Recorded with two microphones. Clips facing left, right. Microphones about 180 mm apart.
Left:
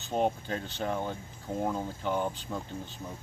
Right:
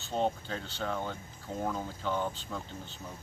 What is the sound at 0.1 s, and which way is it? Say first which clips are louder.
Speech: left 3 dB; 15° left (ahead or behind).